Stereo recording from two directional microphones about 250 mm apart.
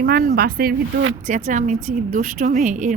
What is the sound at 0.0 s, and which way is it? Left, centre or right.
A woman's voice, right.